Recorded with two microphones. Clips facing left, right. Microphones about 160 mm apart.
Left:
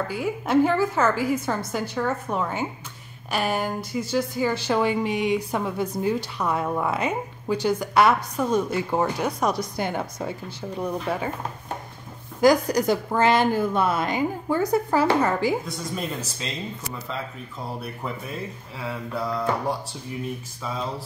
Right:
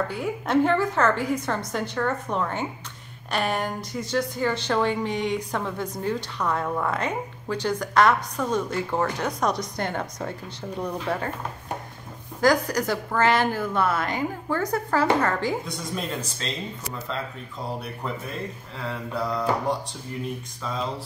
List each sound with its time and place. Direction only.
0.1 s a woman's voice: 5° left (ahead or behind)
12.4 s speech: 15° left (ahead or behind)
15.6 s a woman's voice: centre (ahead or behind)
17.7 s a woman's voice: centre (ahead or behind)
20.6 s a woman's voice: 5° left (ahead or behind)